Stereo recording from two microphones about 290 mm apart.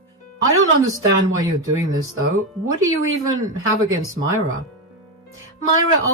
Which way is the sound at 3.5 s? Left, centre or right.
Right.